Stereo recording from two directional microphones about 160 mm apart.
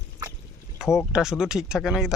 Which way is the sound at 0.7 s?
5° right (ahead or behind).